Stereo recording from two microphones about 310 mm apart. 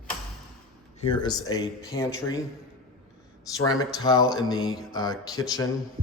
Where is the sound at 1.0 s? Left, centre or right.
Centre.